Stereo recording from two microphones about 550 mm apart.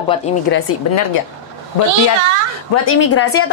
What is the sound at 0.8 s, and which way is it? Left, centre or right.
Speech, left.